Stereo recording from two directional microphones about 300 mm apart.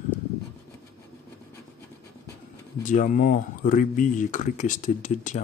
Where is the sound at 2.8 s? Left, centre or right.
Left.